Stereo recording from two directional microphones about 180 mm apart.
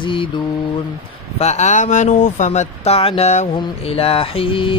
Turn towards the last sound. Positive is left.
turn(degrees=30)  # may be behind; listen again after turning